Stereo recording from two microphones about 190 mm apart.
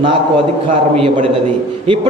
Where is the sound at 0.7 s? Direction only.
40° right (ahead or behind).